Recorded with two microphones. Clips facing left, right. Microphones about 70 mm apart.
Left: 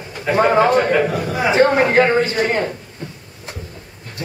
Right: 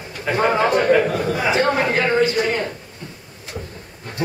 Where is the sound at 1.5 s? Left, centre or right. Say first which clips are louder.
Left 6 dB; left.